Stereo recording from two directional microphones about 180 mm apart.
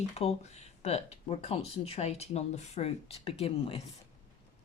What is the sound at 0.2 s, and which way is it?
Speech, 35° left (ahead or behind).